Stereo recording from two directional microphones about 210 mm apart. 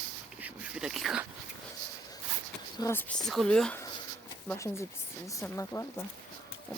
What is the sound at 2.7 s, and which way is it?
Speech, 10° left (ahead or behind).